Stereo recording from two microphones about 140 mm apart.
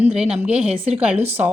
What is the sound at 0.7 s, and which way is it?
Speech, 40° right (ahead or behind).